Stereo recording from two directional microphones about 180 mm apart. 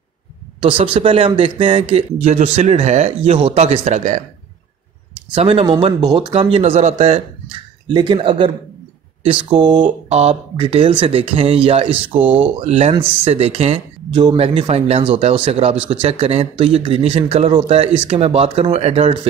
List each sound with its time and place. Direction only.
0.6 s a man's voice: 30° right (ahead or behind)
5.3 s a man's voice: 30° right (ahead or behind)
9.8 s a man's voice: 35° right (ahead or behind)
12.2 s speech: 10° right (ahead or behind)
12.5 s a man's voice: 35° right (ahead or behind)